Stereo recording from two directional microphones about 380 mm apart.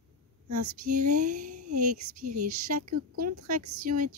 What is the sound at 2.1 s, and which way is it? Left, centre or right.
Speech, right.